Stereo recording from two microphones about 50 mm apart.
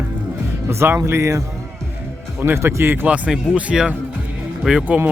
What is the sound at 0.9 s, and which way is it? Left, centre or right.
Speech, right.